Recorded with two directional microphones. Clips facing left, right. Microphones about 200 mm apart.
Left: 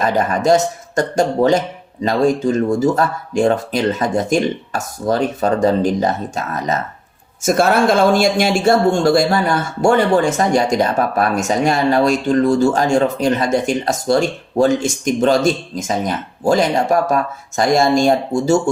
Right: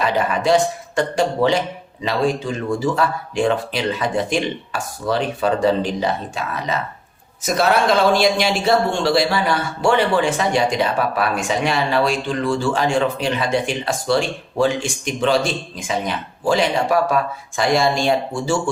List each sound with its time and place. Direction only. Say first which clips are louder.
0.0 s speech: left 3 dB; 45° left (ahead or behind)